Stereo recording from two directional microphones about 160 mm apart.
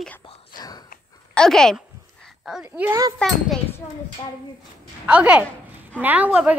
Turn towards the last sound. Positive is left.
turn(degrees=-10)  # may be behind; listen again after turning